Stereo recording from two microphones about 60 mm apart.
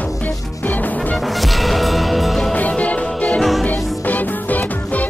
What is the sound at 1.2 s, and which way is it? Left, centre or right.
Music, centre.